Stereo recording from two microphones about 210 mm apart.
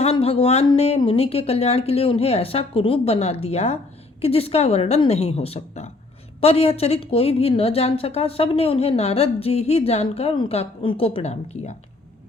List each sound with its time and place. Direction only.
0.0 s a woman's voice: 25° left (ahead or behind)